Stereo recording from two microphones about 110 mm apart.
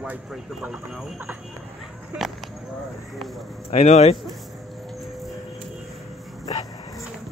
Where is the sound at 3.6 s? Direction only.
75° left (ahead or behind).